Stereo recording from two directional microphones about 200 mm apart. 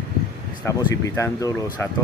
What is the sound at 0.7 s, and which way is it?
Speech, 15° left (ahead or behind).